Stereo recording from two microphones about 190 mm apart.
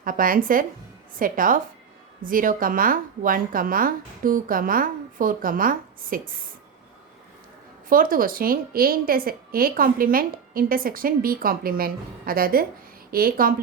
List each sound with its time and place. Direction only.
0.0 s a woman's voice: 45° right (ahead or behind)
7.9 s a woman's voice: 45° right (ahead or behind)